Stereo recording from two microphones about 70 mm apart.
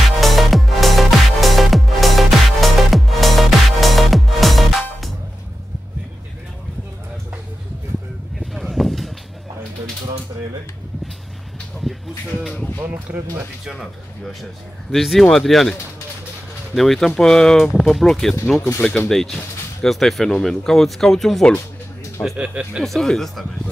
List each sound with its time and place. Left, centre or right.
0.0 s music: centre
8.4 s a sound: centre
13.1 s speech: right
13.7 s speech: centre
16.7 s speech: centre
22.4 s speech: centre
22.8 s speech: centre